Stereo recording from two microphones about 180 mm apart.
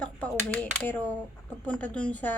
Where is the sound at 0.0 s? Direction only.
5° left (ahead or behind).